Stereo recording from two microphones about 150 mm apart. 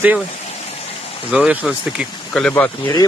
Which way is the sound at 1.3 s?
5° right (ahead or behind).